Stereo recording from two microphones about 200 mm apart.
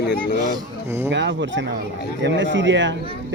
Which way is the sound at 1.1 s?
65° right (ahead or behind).